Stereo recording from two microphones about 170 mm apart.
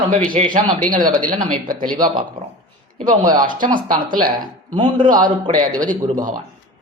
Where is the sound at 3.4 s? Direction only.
50° right (ahead or behind).